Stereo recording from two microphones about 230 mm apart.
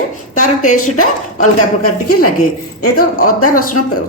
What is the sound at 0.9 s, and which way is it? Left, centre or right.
Speech, left.